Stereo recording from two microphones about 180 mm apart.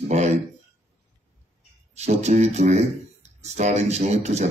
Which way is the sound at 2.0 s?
40° right (ahead or behind).